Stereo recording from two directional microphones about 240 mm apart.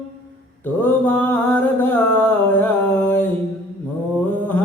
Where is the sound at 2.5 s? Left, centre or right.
Centre.